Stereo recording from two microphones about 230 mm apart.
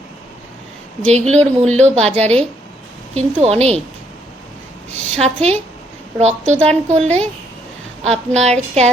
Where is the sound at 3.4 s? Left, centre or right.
Right.